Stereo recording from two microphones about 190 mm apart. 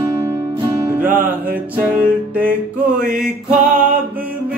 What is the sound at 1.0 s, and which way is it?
Music, 45° right (ahead or behind).